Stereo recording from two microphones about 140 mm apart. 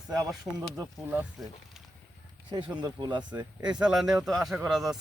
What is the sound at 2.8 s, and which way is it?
Speech, 30° right (ahead or behind).